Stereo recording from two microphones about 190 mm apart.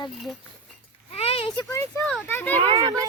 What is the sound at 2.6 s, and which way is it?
Speech, 30° right (ahead or behind).